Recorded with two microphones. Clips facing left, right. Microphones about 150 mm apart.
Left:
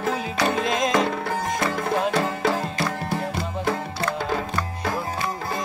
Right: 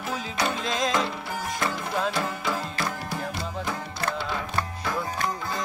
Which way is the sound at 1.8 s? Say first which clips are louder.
Left 5 dB; 55° left (ahead or behind).